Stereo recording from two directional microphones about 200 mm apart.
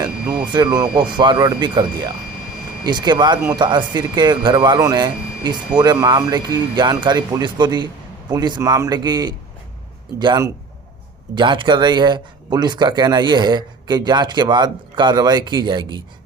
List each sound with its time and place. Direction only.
0.5 s speech: 20° right (ahead or behind)